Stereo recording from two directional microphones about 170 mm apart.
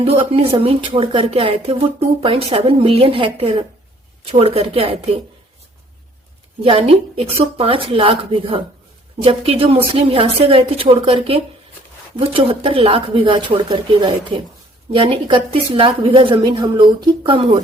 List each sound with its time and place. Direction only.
0.0 s a woman's voice: 35° right (ahead or behind)
6.6 s a woman's voice: 35° right (ahead or behind)